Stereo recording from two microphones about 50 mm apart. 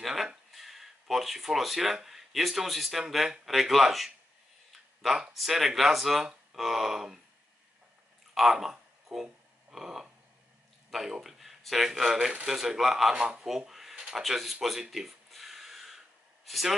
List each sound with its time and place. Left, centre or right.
0.0 s a sound: centre
0.5 s speech: centre
8.4 s speech: centre
9.1 s a sound: centre
10.9 s speech: centre
13.1 s speech: centre
13.5 s a sound: centre
14.2 s gasp: centre
16.4 s speech: centre